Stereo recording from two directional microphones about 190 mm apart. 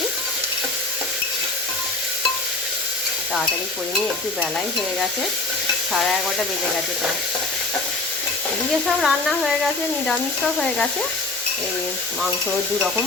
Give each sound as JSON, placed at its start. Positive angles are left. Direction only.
{"t": 5.9, "sound": "speech", "side_deg": 0}
{"t": 9.0, "sound": "speech", "side_deg": 0}